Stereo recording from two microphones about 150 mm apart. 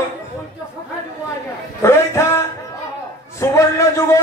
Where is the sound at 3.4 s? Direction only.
20° left (ahead or behind).